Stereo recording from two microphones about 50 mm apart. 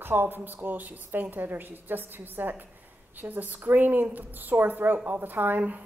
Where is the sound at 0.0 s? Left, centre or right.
Right.